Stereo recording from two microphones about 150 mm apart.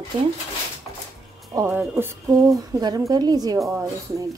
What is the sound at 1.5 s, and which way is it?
Speech, 15° right (ahead or behind).